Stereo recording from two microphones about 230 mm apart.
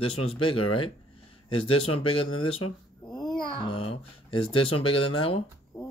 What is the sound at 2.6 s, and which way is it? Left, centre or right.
Speech, left.